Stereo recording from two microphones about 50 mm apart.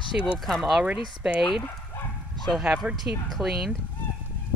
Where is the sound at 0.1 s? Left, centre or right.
Right.